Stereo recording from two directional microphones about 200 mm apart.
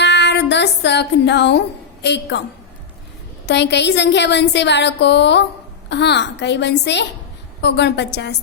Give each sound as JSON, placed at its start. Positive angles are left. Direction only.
{"t": 0.0, "sound": "music", "side_deg": 60}
{"t": 3.4, "sound": "a woman's voice", "side_deg": 60}